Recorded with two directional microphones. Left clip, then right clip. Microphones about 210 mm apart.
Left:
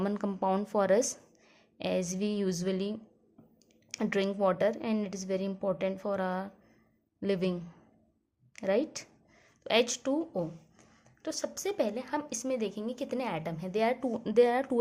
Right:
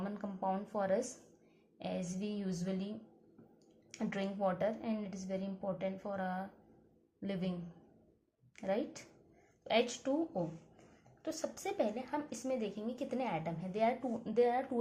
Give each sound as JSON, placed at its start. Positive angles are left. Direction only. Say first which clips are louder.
{"t": 0.0, "sound": "a woman's voice", "louder": "left 8 dB", "side_deg": 50}
{"t": 3.9, "sound": "a woman's voice", "louder": "left 9 dB", "side_deg": 45}
{"t": 8.5, "sound": "a woman's voice", "louder": "left 8 dB", "side_deg": 45}